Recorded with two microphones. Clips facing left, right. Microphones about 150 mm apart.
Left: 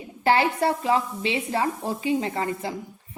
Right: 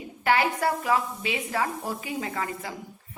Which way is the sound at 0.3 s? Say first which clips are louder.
Left 3 dB; 30° left (ahead or behind).